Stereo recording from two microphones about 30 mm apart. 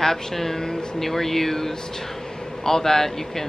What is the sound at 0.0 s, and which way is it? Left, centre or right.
Speech, centre.